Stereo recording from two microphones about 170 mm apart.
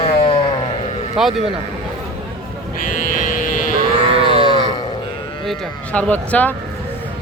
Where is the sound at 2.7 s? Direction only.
55° left (ahead or behind).